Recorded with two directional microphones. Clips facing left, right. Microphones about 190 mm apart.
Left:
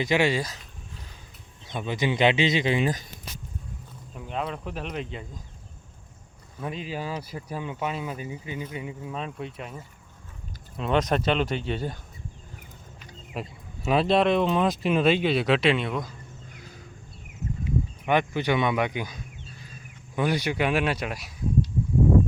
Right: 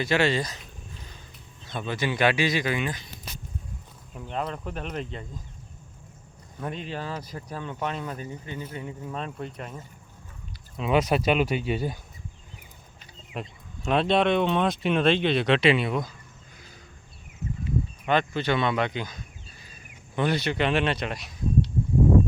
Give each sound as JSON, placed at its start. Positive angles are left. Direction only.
{"t": 0.0, "sound": "speech", "side_deg": 15}
{"t": 1.7, "sound": "speech", "side_deg": 15}
{"t": 2.8, "sound": "speech", "side_deg": 40}
{"t": 4.1, "sound": "speech", "side_deg": 0}
{"t": 6.6, "sound": "speech", "side_deg": 5}
{"t": 10.8, "sound": "speech", "side_deg": -5}
{"t": 13.3, "sound": "speech", "side_deg": 5}
{"t": 17.7, "sound": "speech", "side_deg": 15}
{"t": 19.5, "sound": "a sound", "side_deg": 0}
{"t": 20.1, "sound": "speech", "side_deg": 10}